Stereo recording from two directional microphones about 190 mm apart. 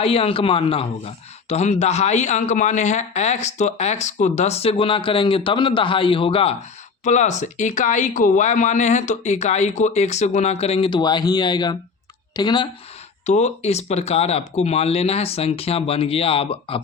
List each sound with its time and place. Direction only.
0.0 s speech: 30° left (ahead or behind)
13.2 s speech: 35° left (ahead or behind)